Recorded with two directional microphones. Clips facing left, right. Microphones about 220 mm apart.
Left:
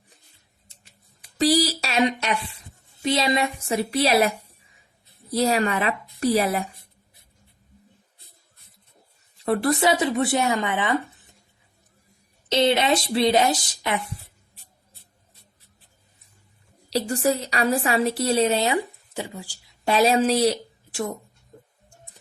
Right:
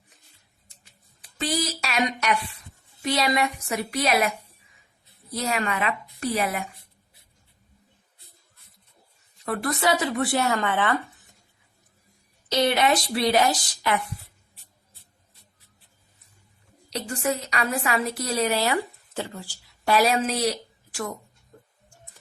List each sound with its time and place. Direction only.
1.4 s a woman's voice: 35° left (ahead or behind)
5.4 s a woman's voice: 35° left (ahead or behind)
9.4 s a woman's voice: 30° left (ahead or behind)
12.5 s a woman's voice: 25° left (ahead or behind)
16.9 s a woman's voice: 35° left (ahead or behind)